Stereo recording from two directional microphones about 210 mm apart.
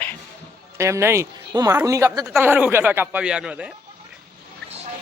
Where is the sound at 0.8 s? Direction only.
15° right (ahead or behind).